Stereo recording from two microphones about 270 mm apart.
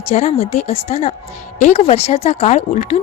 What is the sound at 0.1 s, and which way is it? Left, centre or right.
A woman's voice, left.